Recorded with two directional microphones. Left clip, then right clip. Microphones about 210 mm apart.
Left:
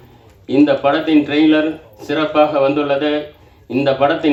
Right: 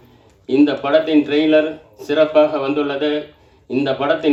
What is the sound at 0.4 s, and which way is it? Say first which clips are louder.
Speech: left 3 dB; 55° right (ahead or behind).